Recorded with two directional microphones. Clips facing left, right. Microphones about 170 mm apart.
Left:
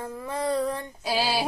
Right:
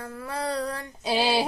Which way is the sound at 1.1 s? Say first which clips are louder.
Right 2 dB; 20° right (ahead or behind).